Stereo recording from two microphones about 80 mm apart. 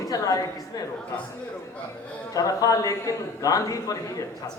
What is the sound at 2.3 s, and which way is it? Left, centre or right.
A woman's voice, left.